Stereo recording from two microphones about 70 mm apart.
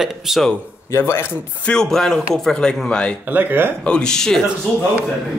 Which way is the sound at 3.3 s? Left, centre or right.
Right.